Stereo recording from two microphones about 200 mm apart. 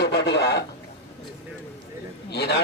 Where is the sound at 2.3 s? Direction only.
55° left (ahead or behind).